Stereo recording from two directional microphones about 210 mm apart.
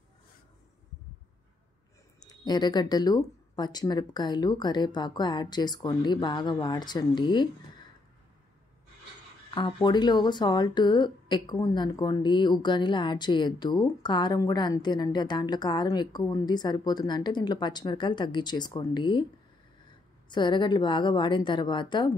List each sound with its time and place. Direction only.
2.1 s speech: 20° left (ahead or behind)
9.5 s speech: 20° left (ahead or behind)
20.2 s speech: 20° left (ahead or behind)